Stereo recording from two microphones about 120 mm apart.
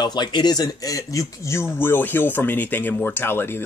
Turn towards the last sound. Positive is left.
turn(degrees=20)  # may be behind; listen again after turning